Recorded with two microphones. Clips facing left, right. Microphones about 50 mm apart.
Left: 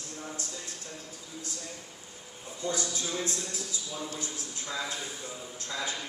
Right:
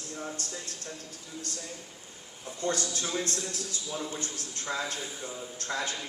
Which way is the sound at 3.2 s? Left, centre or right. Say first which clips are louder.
Right 1 dB; right.